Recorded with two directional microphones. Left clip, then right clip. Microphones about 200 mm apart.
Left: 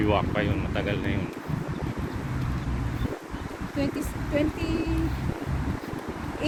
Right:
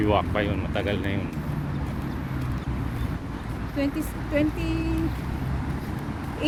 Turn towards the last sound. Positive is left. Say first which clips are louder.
# right 2 dB
turn(degrees=-50)  # may be behind; listen again after turning